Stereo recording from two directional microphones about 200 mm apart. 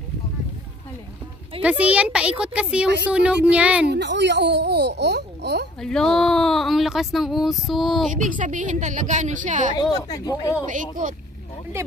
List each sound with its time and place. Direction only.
1.6 s speech: 5° right (ahead or behind)
3.8 s speech: 60° right (ahead or behind)
5.8 s speech: 5° left (ahead or behind)
8.1 s a woman's voice: 40° right (ahead or behind)
9.9 s speech: 20° left (ahead or behind)
10.7 s a woman's voice: 40° right (ahead or behind)